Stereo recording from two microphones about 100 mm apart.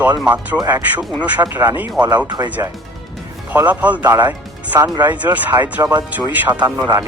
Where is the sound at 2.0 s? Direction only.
45° right (ahead or behind).